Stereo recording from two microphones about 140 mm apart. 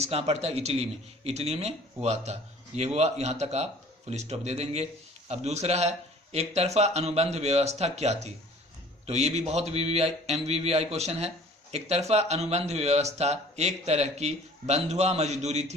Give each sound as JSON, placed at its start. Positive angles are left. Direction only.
{"t": 0.0, "sound": "speech", "side_deg": -50}